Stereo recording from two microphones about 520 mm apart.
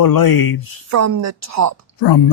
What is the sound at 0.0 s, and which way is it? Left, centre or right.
Speech, left.